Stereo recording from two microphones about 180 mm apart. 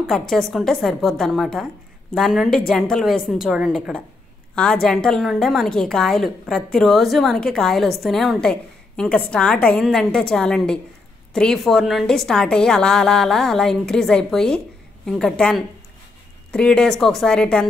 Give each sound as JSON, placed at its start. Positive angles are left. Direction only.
{"t": 0.0, "sound": "a woman's voice", "side_deg": 0}